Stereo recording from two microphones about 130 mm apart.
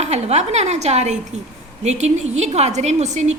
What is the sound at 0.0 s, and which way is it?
A woman's voice, 60° right (ahead or behind).